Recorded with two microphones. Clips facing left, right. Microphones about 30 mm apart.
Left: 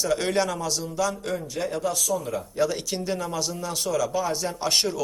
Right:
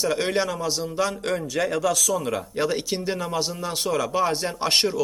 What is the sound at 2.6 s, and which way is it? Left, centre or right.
Speech, right.